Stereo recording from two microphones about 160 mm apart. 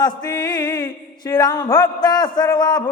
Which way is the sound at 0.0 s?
25° left (ahead or behind).